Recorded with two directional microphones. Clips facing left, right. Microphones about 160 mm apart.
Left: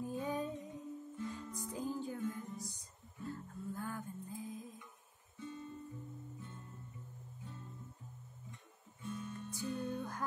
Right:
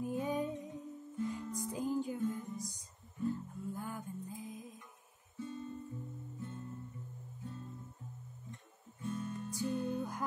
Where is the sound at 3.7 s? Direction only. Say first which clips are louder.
Left 2 dB; 15° right (ahead or behind).